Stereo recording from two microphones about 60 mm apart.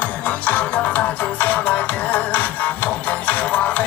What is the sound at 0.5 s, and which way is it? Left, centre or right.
Music, left.